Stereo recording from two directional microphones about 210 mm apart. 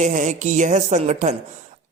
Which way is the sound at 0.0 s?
35° right (ahead or behind).